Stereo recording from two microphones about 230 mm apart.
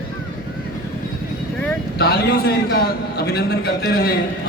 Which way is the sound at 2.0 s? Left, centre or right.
Left.